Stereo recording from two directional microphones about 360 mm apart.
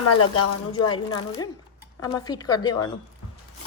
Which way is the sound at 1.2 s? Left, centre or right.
Centre.